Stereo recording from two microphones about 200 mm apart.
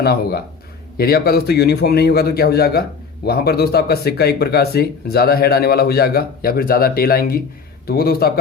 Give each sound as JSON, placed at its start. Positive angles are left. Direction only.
{"t": 0.0, "sound": "speech", "side_deg": 50}